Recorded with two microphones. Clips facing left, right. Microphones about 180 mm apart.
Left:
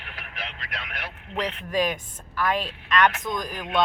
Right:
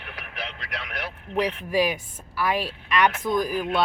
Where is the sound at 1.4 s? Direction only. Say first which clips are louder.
Right 3 dB; 10° right (ahead or behind).